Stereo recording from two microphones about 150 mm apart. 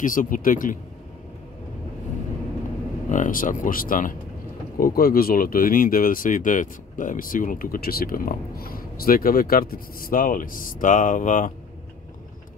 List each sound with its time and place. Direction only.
0.0 s speech: 65° left (ahead or behind)
3.1 s speech: 60° left (ahead or behind)
4.7 s speech: 75° left (ahead or behind); by 11.5 s 55° left (ahead or behind)